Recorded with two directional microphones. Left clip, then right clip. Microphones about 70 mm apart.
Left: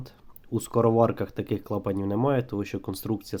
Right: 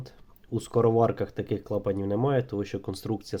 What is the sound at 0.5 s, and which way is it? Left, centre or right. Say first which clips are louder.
Speech: left 1 dB; left.